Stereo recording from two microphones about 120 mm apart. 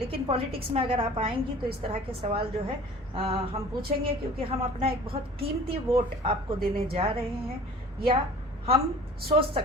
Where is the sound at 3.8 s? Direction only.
50° right (ahead or behind).